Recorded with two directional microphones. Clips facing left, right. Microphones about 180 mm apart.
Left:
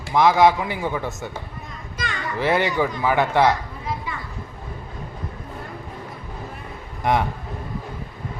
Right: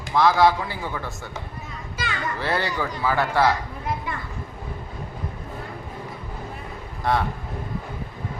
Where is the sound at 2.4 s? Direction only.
15° left (ahead or behind).